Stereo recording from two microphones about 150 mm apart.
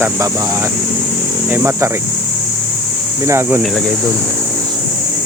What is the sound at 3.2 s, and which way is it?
Speech, 15° right (ahead or behind).